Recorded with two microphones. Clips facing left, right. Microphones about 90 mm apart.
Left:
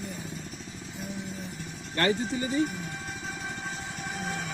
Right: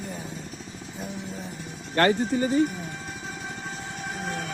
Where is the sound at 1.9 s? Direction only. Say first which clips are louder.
Right 5 dB; 45° right (ahead or behind).